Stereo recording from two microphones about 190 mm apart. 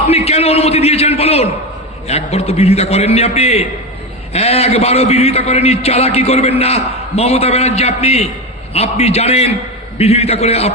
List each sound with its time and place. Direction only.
0.1 s a man's voice: 30° left (ahead or behind)